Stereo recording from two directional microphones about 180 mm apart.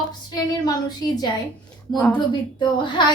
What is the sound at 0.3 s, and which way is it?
A woman's voice, 20° left (ahead or behind).